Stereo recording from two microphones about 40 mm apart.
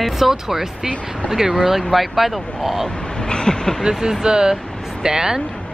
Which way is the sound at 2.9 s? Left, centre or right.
Left.